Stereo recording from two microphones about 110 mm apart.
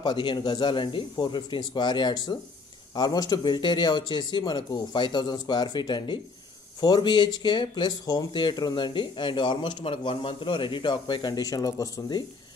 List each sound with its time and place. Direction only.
0.0 s speech: 45° left (ahead or behind)